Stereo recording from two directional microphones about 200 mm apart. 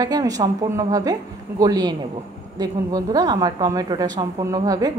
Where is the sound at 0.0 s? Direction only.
20° right (ahead or behind).